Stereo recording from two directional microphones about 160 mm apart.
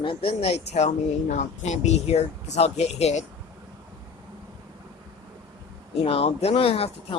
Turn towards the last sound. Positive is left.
turn(degrees=35)  # may be behind; listen again after turning